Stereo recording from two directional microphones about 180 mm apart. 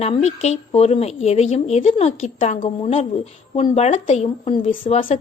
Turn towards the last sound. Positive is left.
turn(degrees=35)  # may be behind; listen again after turning